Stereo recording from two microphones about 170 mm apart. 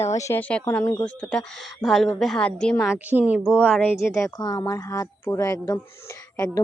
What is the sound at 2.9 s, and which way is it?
Speech, 10° right (ahead or behind).